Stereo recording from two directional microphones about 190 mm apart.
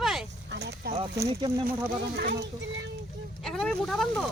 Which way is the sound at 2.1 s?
60° right (ahead or behind).